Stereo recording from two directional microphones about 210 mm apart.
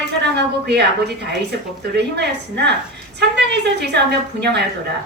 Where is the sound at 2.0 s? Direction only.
55° right (ahead or behind).